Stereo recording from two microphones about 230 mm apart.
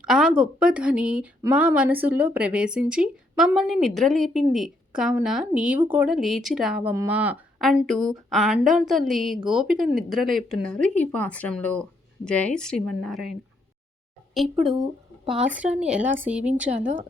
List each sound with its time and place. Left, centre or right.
0.0 s speech: centre
15.3 s speech: centre
16.7 s speech: right